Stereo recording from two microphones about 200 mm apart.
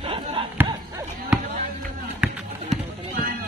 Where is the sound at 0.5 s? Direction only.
10° right (ahead or behind).